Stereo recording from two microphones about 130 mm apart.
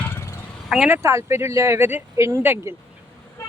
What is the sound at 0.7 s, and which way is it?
Speech, 10° right (ahead or behind).